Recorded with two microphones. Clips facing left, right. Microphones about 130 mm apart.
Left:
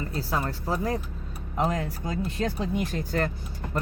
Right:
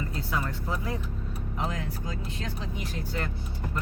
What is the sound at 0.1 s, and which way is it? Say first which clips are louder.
Speech: left 3 dB; 35° left (ahead or behind).